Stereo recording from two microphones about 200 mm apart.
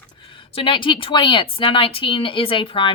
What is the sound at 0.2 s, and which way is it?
Speech, 25° left (ahead or behind).